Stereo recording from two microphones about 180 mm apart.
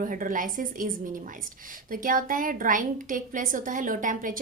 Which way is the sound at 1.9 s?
50° right (ahead or behind).